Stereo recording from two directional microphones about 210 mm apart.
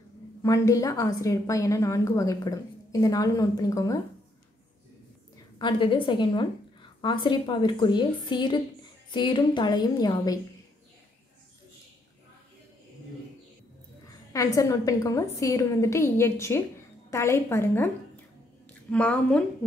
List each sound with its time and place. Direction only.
0.4 s a woman's voice: 15° left (ahead or behind)
5.6 s a woman's voice: 25° left (ahead or behind)
14.3 s a woman's voice: 15° left (ahead or behind)